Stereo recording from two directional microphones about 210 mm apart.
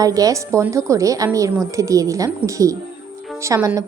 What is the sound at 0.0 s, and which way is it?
Speech, 15° right (ahead or behind).